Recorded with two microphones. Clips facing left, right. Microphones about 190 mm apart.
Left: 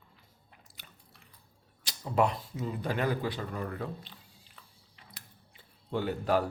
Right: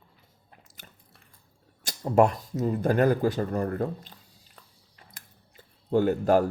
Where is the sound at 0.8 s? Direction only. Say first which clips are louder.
Right 3 dB; 45° right (ahead or behind).